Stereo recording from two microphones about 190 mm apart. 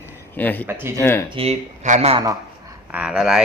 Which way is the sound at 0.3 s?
10° left (ahead or behind).